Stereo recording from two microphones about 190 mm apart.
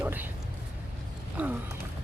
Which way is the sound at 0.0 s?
10° right (ahead or behind).